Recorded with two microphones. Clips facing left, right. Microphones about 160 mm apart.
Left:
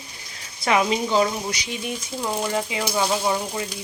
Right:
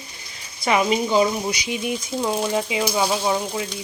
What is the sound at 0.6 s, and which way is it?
Speech, 5° right (ahead or behind).